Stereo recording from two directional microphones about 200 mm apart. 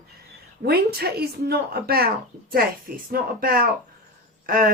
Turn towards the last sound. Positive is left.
turn(degrees=-45)  # may be behind; listen again after turning